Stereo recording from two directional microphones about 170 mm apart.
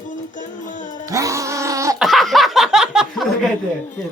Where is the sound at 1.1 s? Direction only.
20° right (ahead or behind).